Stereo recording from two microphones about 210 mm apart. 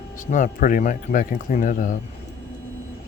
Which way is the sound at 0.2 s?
35° left (ahead or behind).